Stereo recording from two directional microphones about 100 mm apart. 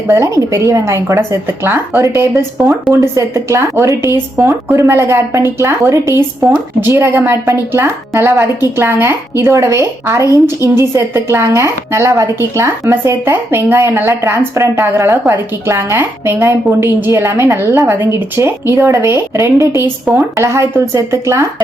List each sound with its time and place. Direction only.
0.1 s a woman's voice: 30° right (ahead or behind)